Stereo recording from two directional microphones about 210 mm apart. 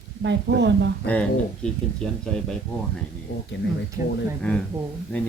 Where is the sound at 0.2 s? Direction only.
55° right (ahead or behind).